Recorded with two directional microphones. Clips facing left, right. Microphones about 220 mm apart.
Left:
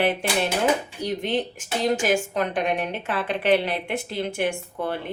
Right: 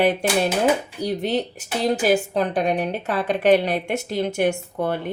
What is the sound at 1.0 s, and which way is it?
A woman's voice, 35° right (ahead or behind).